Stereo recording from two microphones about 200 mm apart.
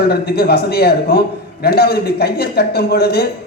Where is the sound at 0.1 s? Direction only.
50° left (ahead or behind).